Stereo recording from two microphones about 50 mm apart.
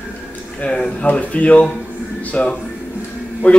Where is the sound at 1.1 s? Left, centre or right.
Left.